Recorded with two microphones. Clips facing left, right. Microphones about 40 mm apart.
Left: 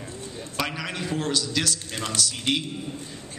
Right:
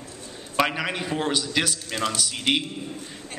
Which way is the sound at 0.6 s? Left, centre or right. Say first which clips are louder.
Right 6 dB; right.